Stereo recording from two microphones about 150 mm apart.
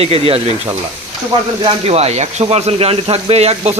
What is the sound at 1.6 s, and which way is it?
Speech, 45° right (ahead or behind).